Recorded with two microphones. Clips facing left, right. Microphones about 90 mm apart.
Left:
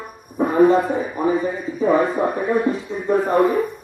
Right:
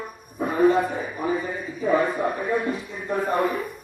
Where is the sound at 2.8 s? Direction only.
20° left (ahead or behind).